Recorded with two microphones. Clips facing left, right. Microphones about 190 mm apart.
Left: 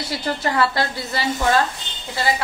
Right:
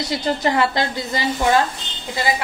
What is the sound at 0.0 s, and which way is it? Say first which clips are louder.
A woman's voice: right 3 dB; 20° right (ahead or behind).